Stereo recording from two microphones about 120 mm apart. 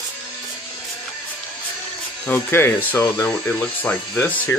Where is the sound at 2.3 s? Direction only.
20° left (ahead or behind).